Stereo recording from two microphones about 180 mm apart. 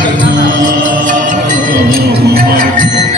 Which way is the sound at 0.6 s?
50° right (ahead or behind).